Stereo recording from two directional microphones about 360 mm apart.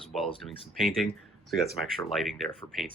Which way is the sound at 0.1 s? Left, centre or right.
Centre.